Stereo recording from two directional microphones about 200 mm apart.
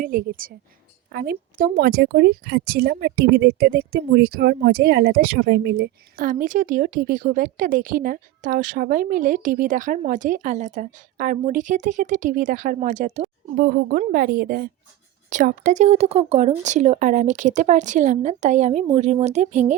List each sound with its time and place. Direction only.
0.0 s speech: 45° right (ahead or behind)
13.6 s speech: 50° right (ahead or behind)